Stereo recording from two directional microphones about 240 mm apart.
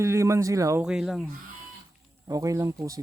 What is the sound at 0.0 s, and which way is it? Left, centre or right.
Speech, centre.